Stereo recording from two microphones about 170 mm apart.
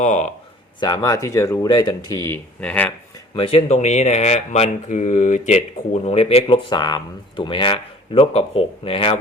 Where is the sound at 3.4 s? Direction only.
35° left (ahead or behind).